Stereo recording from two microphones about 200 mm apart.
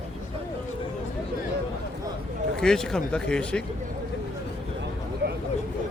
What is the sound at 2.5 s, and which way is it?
Speech, 5° left (ahead or behind).